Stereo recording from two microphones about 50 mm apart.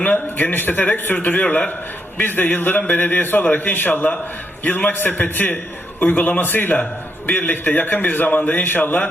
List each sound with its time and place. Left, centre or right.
0.0 s a man's voice: left